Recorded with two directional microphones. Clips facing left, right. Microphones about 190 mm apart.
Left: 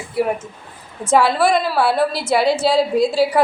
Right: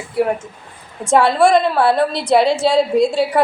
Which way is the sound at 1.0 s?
Centre (ahead or behind).